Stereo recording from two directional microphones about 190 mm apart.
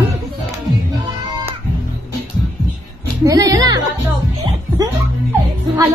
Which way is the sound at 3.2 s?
20° right (ahead or behind).